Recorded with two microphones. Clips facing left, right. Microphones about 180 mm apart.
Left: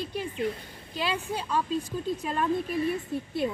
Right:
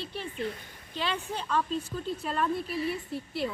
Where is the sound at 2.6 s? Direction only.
50° left (ahead or behind).